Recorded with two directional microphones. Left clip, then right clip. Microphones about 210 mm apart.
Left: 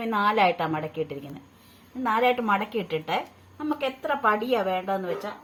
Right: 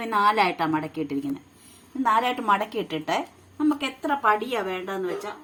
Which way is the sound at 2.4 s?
25° right (ahead or behind).